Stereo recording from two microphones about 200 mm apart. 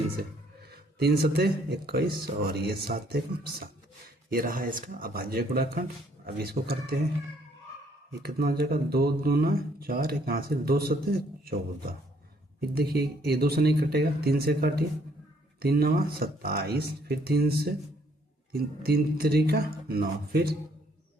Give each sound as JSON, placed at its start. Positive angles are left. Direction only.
{"t": 0.7, "sound": "speech", "side_deg": -50}
{"t": 8.2, "sound": "speech", "side_deg": -50}
{"t": 12.7, "sound": "speech", "side_deg": -50}